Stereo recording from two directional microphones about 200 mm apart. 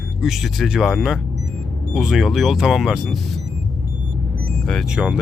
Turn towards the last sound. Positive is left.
turn(degrees=-5)  # may be behind; listen again after turning